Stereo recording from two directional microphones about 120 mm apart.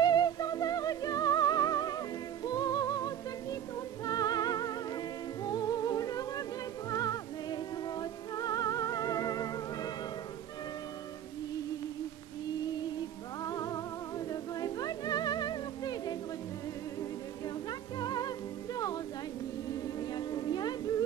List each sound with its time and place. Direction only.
0.0 s music: 35° left (ahead or behind)
13.4 s music: 30° left (ahead or behind)
17.6 s music: 35° left (ahead or behind)
20.1 s humming: 35° left (ahead or behind)